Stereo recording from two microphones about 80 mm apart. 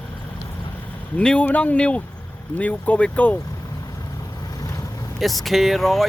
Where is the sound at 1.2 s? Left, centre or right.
Centre.